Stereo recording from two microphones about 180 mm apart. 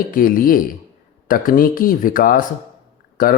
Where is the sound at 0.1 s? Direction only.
50° left (ahead or behind).